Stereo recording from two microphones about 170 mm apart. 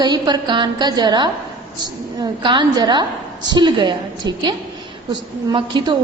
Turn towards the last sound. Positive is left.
turn(degrees=-30)  # may be behind; listen again after turning